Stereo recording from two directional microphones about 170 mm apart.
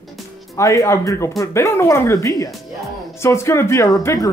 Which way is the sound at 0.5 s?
20° left (ahead or behind).